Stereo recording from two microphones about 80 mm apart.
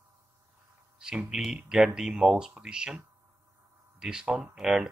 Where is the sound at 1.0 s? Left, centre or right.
Centre.